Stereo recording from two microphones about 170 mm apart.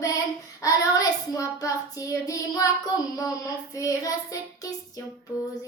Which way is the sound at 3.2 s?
20° left (ahead or behind).